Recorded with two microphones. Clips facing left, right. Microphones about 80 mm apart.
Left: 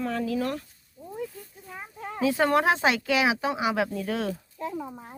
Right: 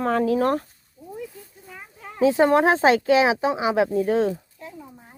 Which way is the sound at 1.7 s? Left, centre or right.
Left.